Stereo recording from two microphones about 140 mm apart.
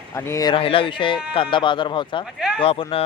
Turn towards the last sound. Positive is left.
turn(degrees=45)  # may be behind; listen again after turning